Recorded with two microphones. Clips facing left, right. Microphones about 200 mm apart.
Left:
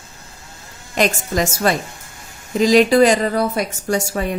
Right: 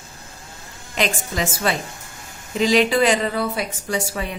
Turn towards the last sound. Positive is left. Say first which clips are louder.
# left 5 dB
turn(degrees=45)  # may be behind; listen again after turning